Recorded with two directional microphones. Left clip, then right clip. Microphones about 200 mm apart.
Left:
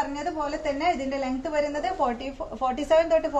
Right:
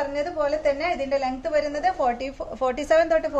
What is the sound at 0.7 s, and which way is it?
A woman's voice, 30° right (ahead or behind).